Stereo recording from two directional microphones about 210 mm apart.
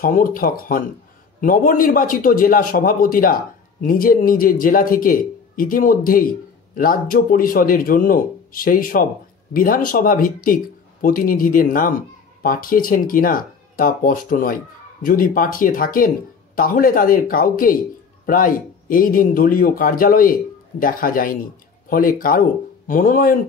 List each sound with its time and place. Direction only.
0.0 s a man's voice: 40° left (ahead or behind)